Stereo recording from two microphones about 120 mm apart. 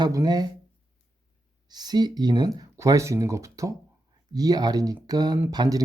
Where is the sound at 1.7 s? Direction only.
35° right (ahead or behind).